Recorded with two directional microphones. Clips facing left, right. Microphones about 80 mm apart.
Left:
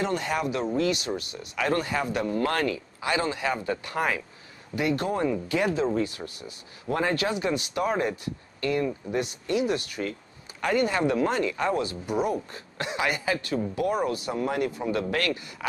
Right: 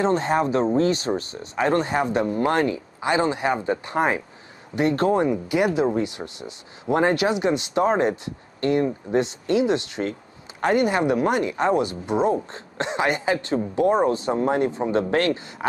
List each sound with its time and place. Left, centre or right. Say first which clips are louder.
0.0 s speech: right 7 dB; right
5.1 s speech: right 5 dB; right